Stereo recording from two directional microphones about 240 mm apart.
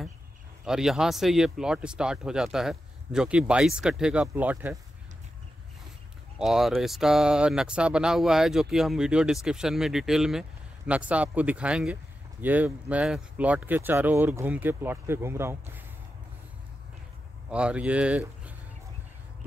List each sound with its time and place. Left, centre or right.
0.7 s speech: centre
6.3 s speech: centre
17.5 s speech: centre